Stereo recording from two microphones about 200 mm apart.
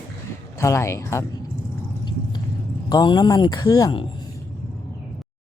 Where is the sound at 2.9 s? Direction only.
20° left (ahead or behind).